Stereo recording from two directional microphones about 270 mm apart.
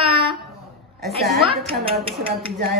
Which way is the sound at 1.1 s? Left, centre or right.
Centre.